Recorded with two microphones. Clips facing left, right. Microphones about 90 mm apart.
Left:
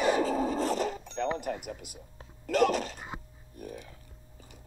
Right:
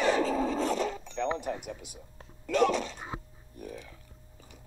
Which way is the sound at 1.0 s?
40° left (ahead or behind).